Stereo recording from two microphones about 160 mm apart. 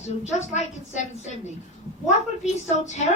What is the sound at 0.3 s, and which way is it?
Speech, 45° left (ahead or behind).